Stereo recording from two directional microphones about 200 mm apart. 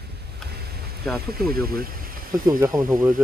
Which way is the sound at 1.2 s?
50° right (ahead or behind).